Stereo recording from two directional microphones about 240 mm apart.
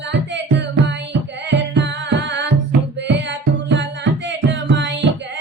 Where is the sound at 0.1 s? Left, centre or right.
Right.